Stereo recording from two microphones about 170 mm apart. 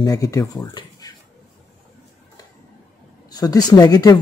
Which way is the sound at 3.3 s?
25° left (ahead or behind).